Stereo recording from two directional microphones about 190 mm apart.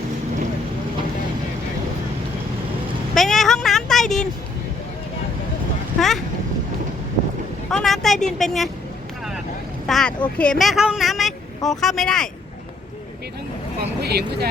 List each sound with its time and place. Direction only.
3.2 s a sound: centre (ahead or behind)
7.7 s vehicle: centre (ahead or behind)
8.4 s a woman's voice: centre (ahead or behind)
9.8 s speech: 5° left (ahead or behind)
14.0 s speech: 55° right (ahead or behind)